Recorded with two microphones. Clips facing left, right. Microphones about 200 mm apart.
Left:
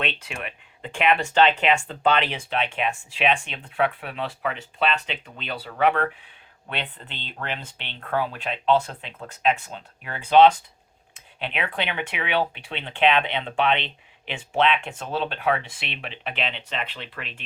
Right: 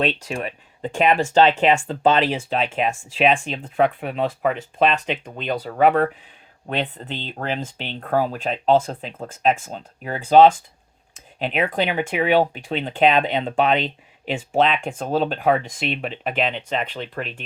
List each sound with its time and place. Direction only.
0.0 s speech: 35° right (ahead or behind)